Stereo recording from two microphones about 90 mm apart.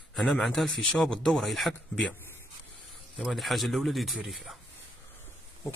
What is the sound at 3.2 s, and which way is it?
A man's voice, centre (ahead or behind).